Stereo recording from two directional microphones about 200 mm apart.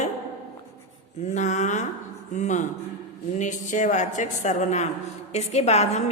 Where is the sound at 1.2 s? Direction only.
35° left (ahead or behind).